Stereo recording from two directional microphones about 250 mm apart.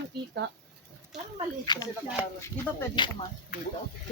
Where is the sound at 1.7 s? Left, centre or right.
Centre.